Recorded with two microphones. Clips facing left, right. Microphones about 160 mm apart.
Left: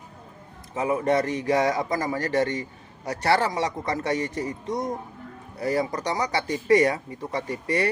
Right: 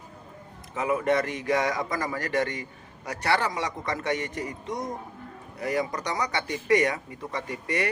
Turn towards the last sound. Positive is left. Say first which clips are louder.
# left 4 dB
turn(degrees=30)  # may be behind; listen again after turning